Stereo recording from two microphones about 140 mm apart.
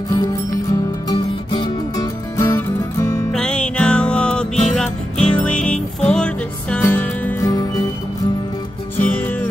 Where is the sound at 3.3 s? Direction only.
5° left (ahead or behind).